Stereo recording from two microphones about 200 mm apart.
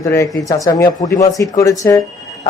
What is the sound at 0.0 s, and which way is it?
A man's voice, 15° left (ahead or behind).